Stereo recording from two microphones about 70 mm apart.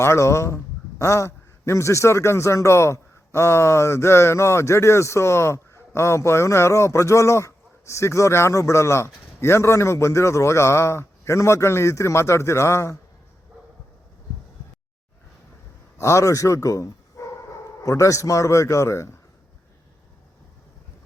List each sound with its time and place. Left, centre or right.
0.0 s a man's voice: left
16.0 s a man's voice: left